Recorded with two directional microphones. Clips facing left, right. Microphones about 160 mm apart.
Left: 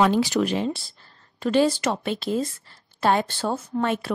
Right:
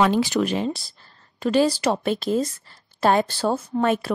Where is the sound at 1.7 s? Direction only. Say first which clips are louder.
Right 3 dB; 35° right (ahead or behind).